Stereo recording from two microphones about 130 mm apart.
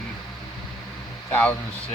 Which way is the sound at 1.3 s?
10° left (ahead or behind).